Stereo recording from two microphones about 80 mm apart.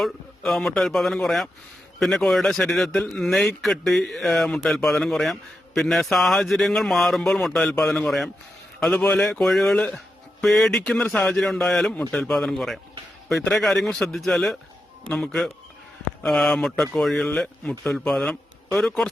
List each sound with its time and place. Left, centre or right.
0.0 s speech: centre
9.2 s speech: centre